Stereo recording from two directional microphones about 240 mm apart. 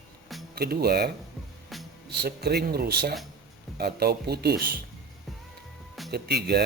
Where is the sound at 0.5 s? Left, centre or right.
Right.